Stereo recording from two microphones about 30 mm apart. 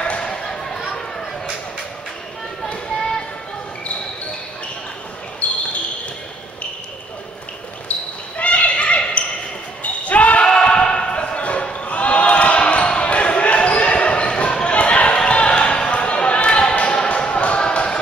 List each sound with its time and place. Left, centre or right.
0.2 s a sound: left
5.4 s basketball bounce: left
7.9 s basketball bounce: left
10.4 s a sound: left
13.9 s basketball bounce: left
15.5 s basketball bounce: left
15.9 s basketball bounce: left
17.6 s basketball bounce: left